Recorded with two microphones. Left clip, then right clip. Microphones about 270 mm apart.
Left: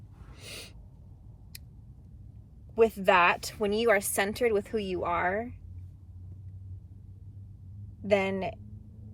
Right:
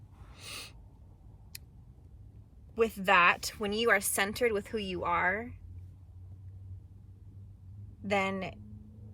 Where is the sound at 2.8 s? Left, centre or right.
Centre.